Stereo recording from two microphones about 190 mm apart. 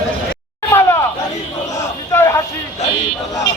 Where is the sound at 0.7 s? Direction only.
15° left (ahead or behind).